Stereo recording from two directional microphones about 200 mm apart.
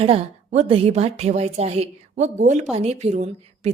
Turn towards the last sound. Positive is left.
turn(degrees=-35)  # may be behind; listen again after turning